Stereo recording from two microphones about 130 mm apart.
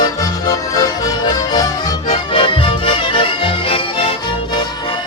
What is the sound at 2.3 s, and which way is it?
Music, 40° left (ahead or behind).